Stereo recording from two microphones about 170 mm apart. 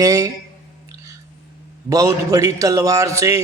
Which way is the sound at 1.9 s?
20° right (ahead or behind).